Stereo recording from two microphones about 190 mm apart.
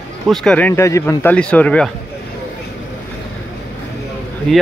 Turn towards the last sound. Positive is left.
turn(degrees=5)  # may be behind; listen again after turning